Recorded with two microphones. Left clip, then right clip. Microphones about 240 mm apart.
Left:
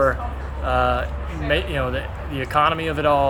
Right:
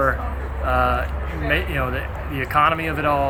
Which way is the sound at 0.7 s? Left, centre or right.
Centre.